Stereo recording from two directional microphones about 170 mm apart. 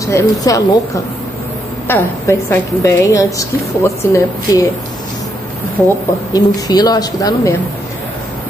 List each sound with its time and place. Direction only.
0.0 s a woman's voice: 20° left (ahead or behind)
5.8 s a woman's voice: 15° left (ahead or behind)